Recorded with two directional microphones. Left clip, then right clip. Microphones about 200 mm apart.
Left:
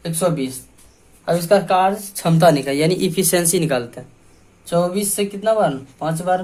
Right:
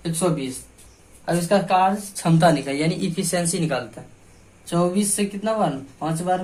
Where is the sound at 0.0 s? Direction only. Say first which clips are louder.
Left 4 dB; 50° left (ahead or behind).